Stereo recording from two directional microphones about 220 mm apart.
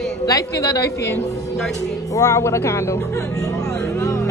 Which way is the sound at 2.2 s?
15° left (ahead or behind).